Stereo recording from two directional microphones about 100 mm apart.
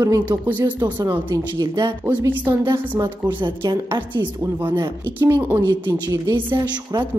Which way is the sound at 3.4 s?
55° right (ahead or behind).